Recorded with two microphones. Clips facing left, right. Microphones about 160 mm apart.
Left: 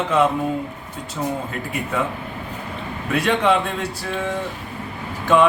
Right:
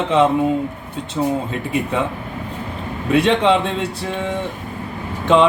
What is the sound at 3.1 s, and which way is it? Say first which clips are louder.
Speech: right 4 dB; 25° right (ahead or behind).